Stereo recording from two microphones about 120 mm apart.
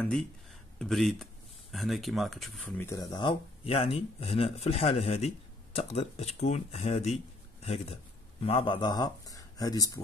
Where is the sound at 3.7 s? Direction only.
55° left (ahead or behind).